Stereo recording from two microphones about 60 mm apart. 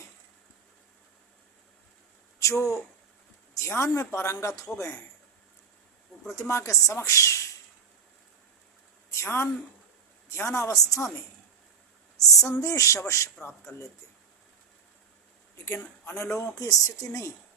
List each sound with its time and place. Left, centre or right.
2.4 s speech: left
6.3 s speech: left
9.1 s speech: left
15.6 s speech: left
16.6 s speech: left